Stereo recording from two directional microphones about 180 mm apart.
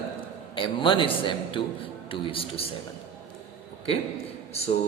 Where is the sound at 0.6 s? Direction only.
25° left (ahead or behind).